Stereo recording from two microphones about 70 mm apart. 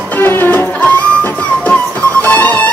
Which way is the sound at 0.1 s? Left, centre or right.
Left.